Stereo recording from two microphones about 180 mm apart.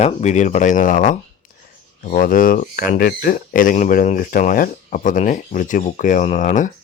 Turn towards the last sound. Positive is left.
turn(degrees=45)  # may be behind; listen again after turning